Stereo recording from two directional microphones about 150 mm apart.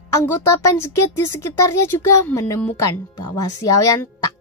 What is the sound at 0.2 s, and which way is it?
Speech, 15° left (ahead or behind).